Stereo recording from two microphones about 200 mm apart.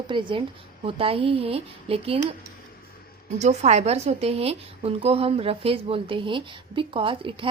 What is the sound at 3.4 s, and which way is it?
A woman's voice, 35° right (ahead or behind).